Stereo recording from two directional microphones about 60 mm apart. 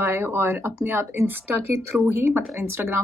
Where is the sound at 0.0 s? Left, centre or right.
Right.